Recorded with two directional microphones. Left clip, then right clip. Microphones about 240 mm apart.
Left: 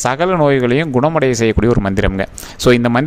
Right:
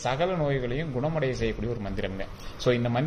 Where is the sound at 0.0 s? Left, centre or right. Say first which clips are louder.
Left 13 dB; left.